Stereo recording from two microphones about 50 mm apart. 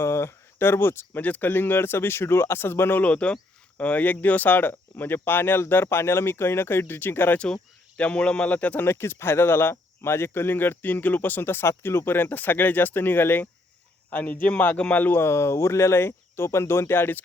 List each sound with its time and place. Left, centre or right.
0.0 s speech: left
1.2 s speech: left
3.0 s speech: left
7.3 s speech: left
8.8 s speech: left
15.1 s speech: left